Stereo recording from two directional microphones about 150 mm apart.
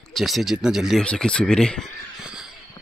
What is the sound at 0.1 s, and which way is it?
Speech, centre (ahead or behind).